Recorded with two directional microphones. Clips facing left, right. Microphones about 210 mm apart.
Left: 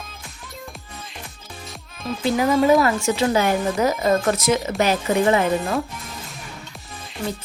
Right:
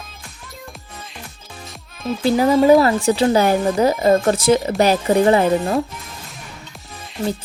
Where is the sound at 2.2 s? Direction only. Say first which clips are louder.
Right 4 dB; 35° right (ahead or behind).